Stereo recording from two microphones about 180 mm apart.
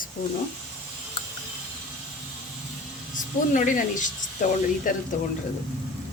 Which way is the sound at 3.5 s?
45° left (ahead or behind).